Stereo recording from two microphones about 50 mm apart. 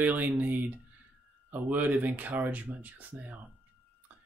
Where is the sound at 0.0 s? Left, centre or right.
Right.